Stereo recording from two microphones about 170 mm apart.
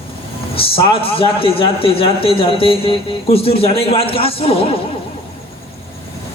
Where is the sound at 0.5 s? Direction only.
35° left (ahead or behind).